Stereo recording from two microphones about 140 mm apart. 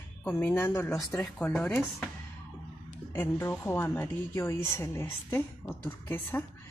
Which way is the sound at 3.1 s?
15° left (ahead or behind).